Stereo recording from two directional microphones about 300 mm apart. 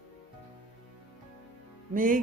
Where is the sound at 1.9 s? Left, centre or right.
Right.